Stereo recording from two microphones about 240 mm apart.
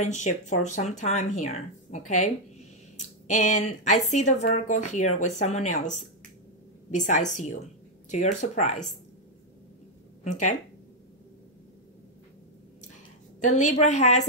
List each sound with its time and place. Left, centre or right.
0.0 s speech: left
10.2 s speech: left
13.4 s speech: left